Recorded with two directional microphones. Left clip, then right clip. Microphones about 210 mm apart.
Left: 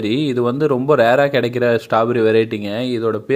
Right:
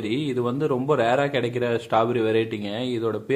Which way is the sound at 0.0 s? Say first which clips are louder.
Left 7 dB; 30° left (ahead or behind).